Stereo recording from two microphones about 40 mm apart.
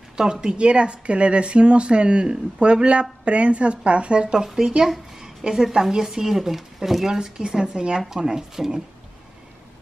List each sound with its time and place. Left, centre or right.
0.2 s speech: right
4.3 s speech: centre
7.1 s speech: centre